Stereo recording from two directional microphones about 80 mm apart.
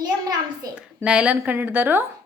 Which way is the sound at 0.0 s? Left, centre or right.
Right.